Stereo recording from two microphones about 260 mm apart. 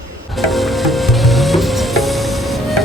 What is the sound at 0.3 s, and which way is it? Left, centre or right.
Music, centre.